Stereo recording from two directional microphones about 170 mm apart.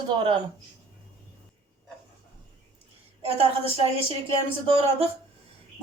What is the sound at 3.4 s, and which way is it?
Speech, 35° right (ahead or behind).